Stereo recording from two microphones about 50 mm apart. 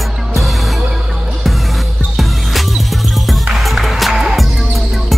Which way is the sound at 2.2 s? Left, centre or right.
Centre.